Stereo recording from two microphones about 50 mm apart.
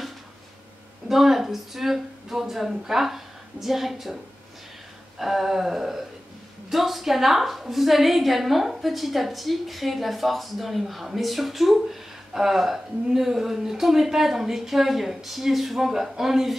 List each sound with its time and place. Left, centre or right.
1.0 s speech: centre
5.2 s a woman's voice: centre